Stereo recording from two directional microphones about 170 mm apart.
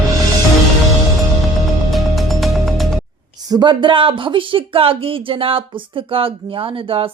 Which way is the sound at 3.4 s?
25° right (ahead or behind).